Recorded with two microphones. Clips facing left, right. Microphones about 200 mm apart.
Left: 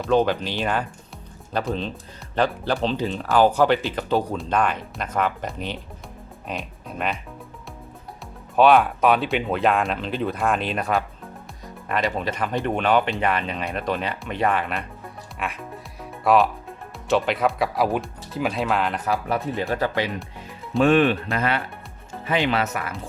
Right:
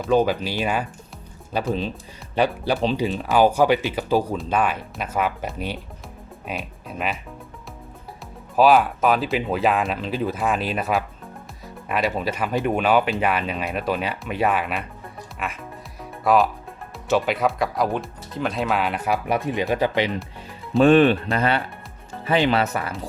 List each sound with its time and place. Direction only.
0.0 s speech: 5° right (ahead or behind)
8.5 s speech: centre (ahead or behind)
19.1 s speech: 15° right (ahead or behind)
20.8 s speech: 30° right (ahead or behind)